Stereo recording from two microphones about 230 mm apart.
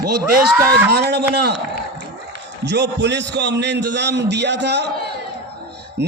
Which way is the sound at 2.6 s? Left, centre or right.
Right.